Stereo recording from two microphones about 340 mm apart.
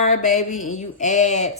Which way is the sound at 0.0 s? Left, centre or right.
Left.